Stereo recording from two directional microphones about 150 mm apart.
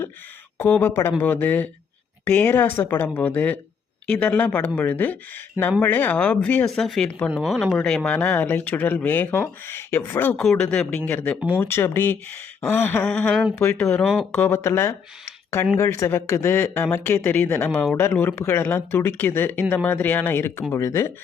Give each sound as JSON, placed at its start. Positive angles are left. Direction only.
{"t": 0.6, "sound": "speech", "side_deg": 15}
{"t": 11.3, "sound": "speech", "side_deg": -10}
{"t": 11.6, "sound": "speech", "side_deg": 15}
{"t": 14.3, "sound": "speech", "side_deg": 15}